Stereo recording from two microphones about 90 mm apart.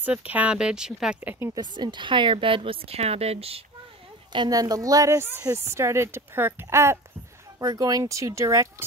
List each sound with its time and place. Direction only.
0.0 s speech: 15° right (ahead or behind)
1.2 s speech: 25° right (ahead or behind)
1.5 s a woman's voice: 55° right (ahead or behind); by 3.6 s 90° right
4.5 s speech: 45° right (ahead or behind)
7.5 s speech: 45° right (ahead or behind)